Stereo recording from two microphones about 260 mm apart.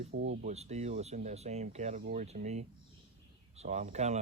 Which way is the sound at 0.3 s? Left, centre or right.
Right.